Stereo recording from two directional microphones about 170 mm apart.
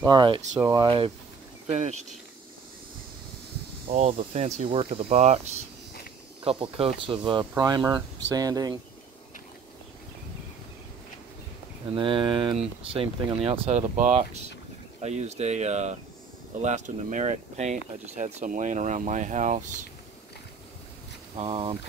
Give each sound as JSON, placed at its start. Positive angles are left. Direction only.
{"t": 0.0, "sound": "speech", "side_deg": -25}
{"t": 1.7, "sound": "speech", "side_deg": -40}
{"t": 4.2, "sound": "speech", "side_deg": -40}
{"t": 6.4, "sound": "speech", "side_deg": -35}
{"t": 11.9, "sound": "speech", "side_deg": -30}
{"t": 21.4, "sound": "speech", "side_deg": -35}